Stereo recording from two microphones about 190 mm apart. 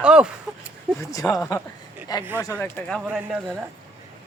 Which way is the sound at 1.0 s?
15° left (ahead or behind).